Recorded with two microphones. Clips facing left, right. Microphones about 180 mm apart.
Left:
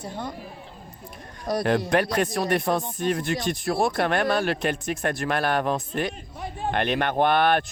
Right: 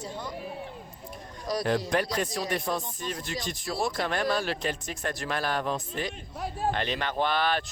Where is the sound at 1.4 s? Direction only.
55° left (ahead or behind).